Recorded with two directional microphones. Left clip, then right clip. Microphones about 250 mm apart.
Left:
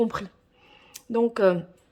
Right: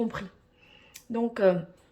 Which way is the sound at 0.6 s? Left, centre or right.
Centre.